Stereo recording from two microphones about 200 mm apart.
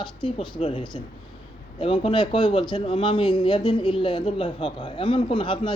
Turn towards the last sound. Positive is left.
turn(degrees=25)  # may be behind; listen again after turning